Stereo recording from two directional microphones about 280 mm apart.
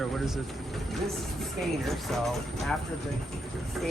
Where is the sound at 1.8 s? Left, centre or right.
Centre.